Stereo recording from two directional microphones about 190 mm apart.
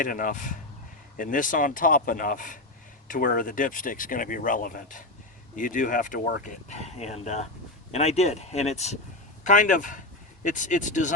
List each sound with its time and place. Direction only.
0.0 s speech: 45° left (ahead or behind)